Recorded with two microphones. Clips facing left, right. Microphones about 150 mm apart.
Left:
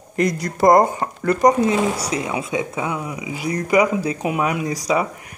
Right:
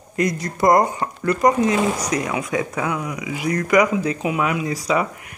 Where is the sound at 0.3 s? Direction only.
30° left (ahead or behind).